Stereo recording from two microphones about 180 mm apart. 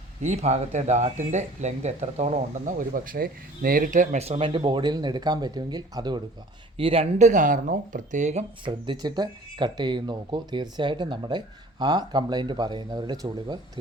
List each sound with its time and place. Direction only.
0.2 s speech: 40° right (ahead or behind)
8.6 s speech: 25° right (ahead or behind)